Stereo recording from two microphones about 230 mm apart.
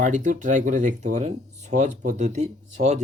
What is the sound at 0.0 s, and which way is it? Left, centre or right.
Speech, right.